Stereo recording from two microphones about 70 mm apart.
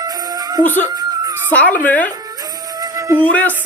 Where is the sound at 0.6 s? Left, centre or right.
Left.